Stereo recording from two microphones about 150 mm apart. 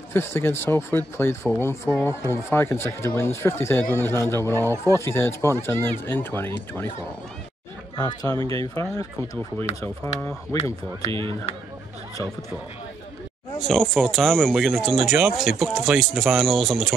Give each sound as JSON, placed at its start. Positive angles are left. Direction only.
{"t": 0.1, "sound": "speech", "side_deg": 15}
{"t": 8.0, "sound": "speech", "side_deg": 25}
{"t": 11.1, "sound": "speech", "side_deg": -35}
{"t": 13.6, "sound": "speech", "side_deg": 0}